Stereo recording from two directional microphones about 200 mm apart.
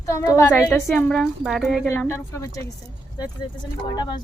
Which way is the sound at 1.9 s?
15° left (ahead or behind).